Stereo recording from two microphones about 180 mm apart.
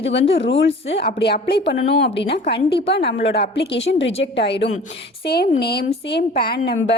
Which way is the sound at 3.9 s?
90° left.